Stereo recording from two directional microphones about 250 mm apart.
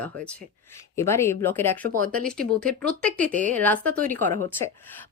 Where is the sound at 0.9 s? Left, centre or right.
Centre.